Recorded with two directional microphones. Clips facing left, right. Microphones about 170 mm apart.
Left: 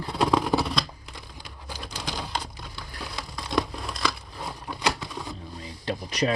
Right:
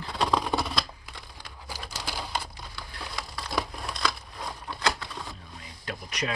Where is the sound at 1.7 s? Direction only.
10° right (ahead or behind).